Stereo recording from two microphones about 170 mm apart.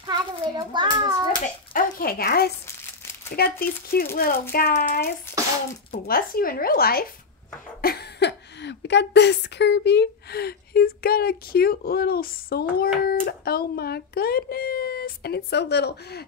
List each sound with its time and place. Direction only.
0.0 s a child's voice: 25° right (ahead or behind)
1.7 s a woman's voice: 55° left (ahead or behind)
5.3 s a sound: 15° left (ahead or behind)
5.9 s a woman's voice: 60° left (ahead or behind)
7.8 s a woman's voice: 75° left (ahead or behind)